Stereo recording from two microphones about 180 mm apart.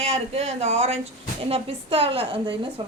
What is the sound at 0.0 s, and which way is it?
A woman's voice, 35° right (ahead or behind).